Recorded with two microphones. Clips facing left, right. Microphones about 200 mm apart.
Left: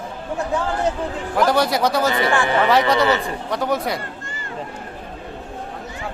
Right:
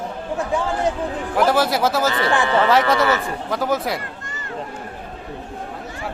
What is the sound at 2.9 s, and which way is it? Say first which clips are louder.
Speech: left 1 dB; 20° left (ahead or behind).